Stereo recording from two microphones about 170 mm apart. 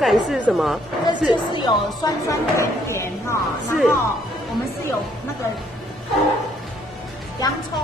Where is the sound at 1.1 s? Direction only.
25° left (ahead or behind).